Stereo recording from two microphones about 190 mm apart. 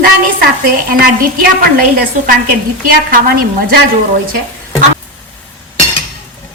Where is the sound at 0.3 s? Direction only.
50° right (ahead or behind).